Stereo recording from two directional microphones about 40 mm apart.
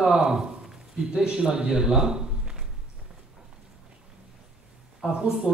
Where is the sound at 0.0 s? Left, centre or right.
Centre.